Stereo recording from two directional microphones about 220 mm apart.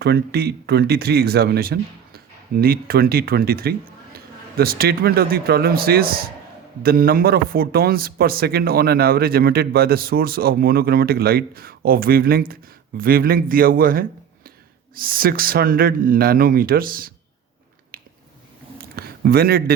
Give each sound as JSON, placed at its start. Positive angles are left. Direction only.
{"t": 0.0, "sound": "speech", "side_deg": -45}
{"t": 17.9, "sound": "finger snapping", "side_deg": -40}
{"t": 18.8, "sound": "a sound", "side_deg": -45}